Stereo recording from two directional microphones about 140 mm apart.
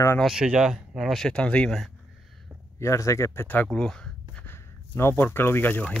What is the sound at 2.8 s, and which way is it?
Speech, 20° left (ahead or behind).